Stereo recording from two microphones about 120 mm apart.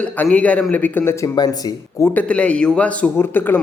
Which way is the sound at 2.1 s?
10° left (ahead or behind).